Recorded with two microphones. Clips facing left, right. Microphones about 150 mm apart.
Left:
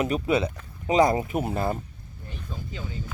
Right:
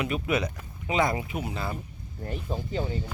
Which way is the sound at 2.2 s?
50° right (ahead or behind).